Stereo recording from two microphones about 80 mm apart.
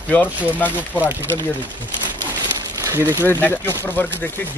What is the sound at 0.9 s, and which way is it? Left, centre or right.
Speech, right.